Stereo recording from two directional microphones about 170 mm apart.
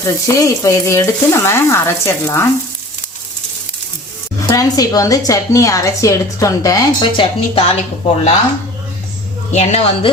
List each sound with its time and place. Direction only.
0.0 s frying: 20° left (ahead or behind)
4.4 s a woman's voice: 20° left (ahead or behind)
9.5 s speech: 40° left (ahead or behind)